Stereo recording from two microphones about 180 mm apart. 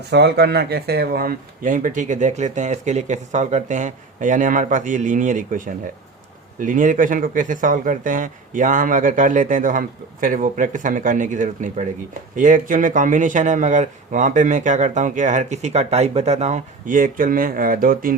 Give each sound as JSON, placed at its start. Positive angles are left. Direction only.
{"t": 0.1, "sound": "speech", "side_deg": -65}